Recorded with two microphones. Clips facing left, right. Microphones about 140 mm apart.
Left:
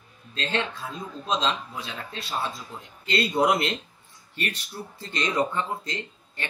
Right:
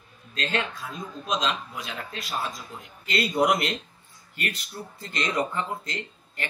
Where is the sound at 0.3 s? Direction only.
30° left (ahead or behind).